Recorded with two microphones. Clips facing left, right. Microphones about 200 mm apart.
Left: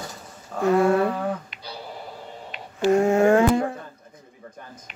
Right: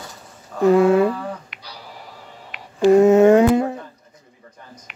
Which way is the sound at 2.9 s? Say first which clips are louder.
Right 6 dB; 20° right (ahead or behind).